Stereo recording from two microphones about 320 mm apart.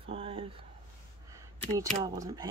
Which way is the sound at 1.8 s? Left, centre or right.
Centre.